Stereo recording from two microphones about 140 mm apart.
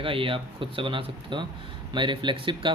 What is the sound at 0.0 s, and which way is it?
Speech, 40° right (ahead or behind).